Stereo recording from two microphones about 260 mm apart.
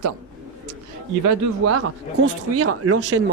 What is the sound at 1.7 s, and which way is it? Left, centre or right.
Speech, right.